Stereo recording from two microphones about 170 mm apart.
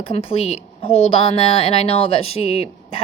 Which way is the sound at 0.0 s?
35° left (ahead or behind).